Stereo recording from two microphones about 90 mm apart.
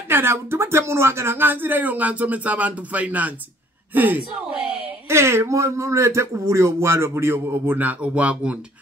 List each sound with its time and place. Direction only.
0.1 s speech: 25° right (ahead or behind)
5.1 s speech: 30° right (ahead or behind); by 8.5 s 15° right (ahead or behind)